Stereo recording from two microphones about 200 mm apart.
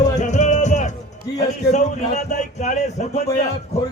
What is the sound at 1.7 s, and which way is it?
Speech, 35° left (ahead or behind).